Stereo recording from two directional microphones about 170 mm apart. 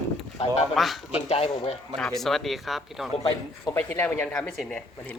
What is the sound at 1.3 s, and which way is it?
Speech, 35° left (ahead or behind).